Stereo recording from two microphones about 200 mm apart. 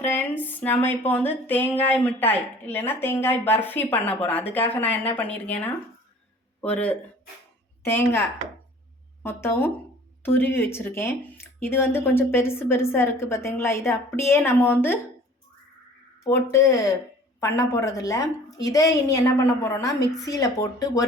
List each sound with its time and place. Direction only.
0.0 s speech: 10° left (ahead or behind)
9.2 s speech: 10° left (ahead or behind)
16.2 s speech: 15° left (ahead or behind)